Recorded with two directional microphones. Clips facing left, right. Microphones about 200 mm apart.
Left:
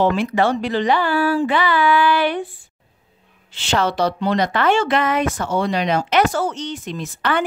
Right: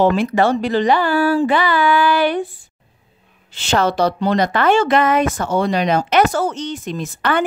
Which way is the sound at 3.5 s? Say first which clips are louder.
Right 3 dB; 45° right (ahead or behind).